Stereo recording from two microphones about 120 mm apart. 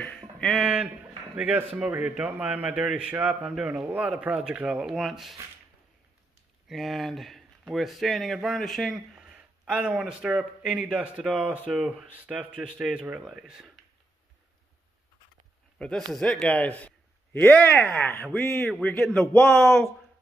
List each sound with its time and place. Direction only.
0.0 s a sound: 5° left (ahead or behind)
0.6 s a man's voice: 10° right (ahead or behind)
6.7 s a man's voice: centre (ahead or behind)
15.8 s a man's voice: 5° left (ahead or behind)